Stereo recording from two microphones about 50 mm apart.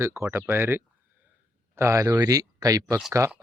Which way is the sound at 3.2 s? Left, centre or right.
Right.